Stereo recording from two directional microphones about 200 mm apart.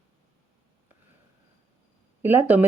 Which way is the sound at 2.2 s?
10° right (ahead or behind).